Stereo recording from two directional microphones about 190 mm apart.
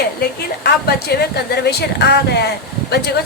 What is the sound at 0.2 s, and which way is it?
A woman's voice, 55° left (ahead or behind).